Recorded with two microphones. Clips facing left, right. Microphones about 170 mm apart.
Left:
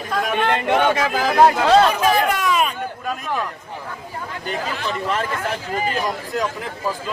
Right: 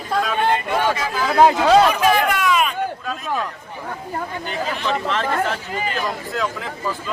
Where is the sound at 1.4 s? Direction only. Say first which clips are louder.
Right 1 dB; 10° right (ahead or behind).